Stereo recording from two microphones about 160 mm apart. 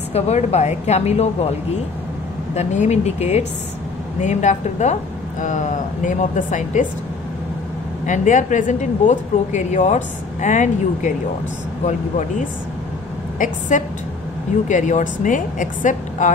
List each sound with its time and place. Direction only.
0.1 s a woman's voice: 40° left (ahead or behind)
2.5 s a woman's voice: 45° left (ahead or behind)
8.1 s a woman's voice: 50° left (ahead or behind)